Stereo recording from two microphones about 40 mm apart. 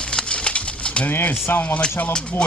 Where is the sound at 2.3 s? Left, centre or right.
Left.